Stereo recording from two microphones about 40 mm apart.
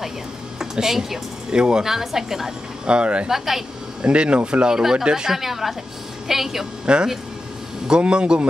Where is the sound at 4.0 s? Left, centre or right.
Right.